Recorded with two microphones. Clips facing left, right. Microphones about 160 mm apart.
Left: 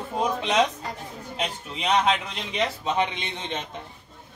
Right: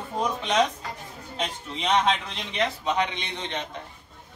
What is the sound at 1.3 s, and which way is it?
A woman's voice, 5° left (ahead or behind).